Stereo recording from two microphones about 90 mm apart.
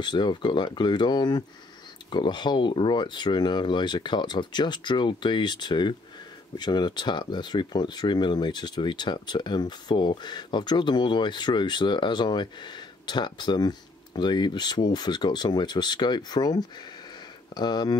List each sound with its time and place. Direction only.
0.0 s speech: 55° left (ahead or behind)